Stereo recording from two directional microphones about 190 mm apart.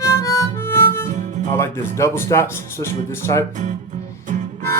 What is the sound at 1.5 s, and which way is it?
Speech, 15° left (ahead or behind).